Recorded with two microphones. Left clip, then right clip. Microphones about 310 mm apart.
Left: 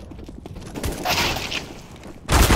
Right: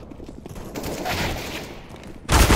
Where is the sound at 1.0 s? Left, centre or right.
Centre.